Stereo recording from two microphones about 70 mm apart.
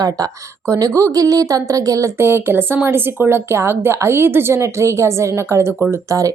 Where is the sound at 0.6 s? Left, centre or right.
Right.